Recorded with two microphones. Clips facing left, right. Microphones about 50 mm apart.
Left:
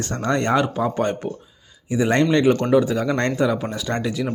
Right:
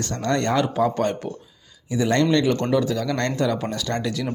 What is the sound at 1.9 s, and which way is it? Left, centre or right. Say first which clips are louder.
Speech: left 2 dB; left.